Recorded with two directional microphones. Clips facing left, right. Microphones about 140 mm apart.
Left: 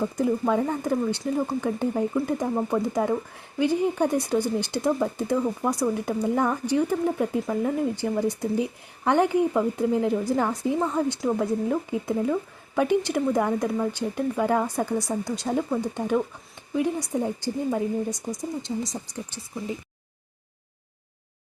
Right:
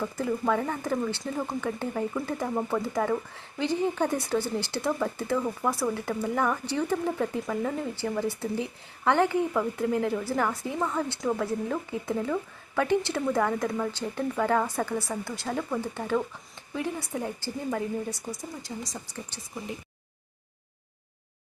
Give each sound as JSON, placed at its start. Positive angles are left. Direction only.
{"t": 0.0, "sound": "a woman's voice", "side_deg": 20}